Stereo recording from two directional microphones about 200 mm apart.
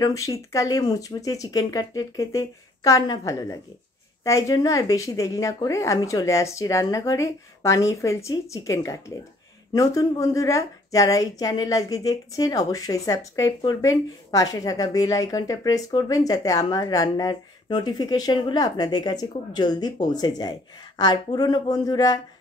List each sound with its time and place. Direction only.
0.0 s a woman's voice: 15° left (ahead or behind)